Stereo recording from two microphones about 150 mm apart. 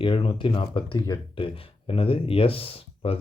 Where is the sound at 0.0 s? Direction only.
35° left (ahead or behind).